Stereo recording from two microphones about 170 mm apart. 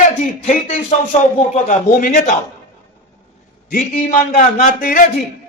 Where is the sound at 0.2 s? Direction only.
45° left (ahead or behind).